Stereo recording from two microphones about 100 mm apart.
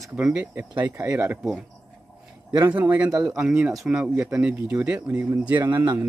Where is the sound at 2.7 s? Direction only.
15° right (ahead or behind).